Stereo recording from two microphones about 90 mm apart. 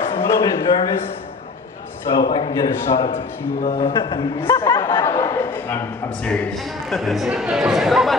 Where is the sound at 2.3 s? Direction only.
50° left (ahead or behind).